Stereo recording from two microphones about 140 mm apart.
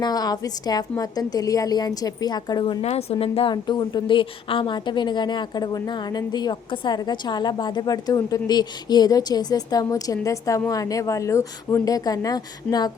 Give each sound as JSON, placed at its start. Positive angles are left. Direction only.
{"t": 0.0, "sound": "a woman's voice", "side_deg": 30}
{"t": 2.8, "sound": "a woman's voice", "side_deg": 50}